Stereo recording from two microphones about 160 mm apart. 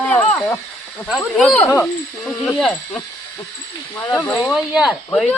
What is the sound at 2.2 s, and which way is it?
Speech, 5° left (ahead or behind).